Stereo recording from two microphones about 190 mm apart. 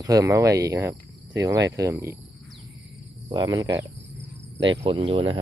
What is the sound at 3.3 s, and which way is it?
Speech, 20° right (ahead or behind).